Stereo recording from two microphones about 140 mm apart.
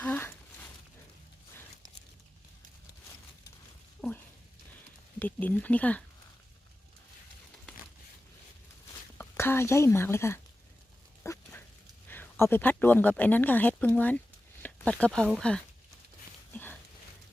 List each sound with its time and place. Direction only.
0.0 s speech: 15° left (ahead or behind)
4.0 s a sound: centre (ahead or behind)
5.2 s speech: 10° left (ahead or behind)
9.1 s speech: 15° left (ahead or behind)
11.2 s dog: 20° left (ahead or behind)
12.0 s speech: 15° left (ahead or behind)